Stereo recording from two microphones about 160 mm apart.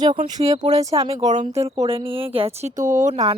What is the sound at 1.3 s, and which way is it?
Speech, 50° right (ahead or behind).